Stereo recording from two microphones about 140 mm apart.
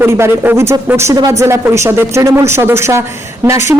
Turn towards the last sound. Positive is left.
turn(degrees=-20)  # may be behind; listen again after turning